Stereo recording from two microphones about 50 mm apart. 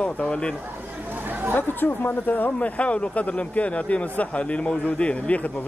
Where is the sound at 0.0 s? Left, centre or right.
Left.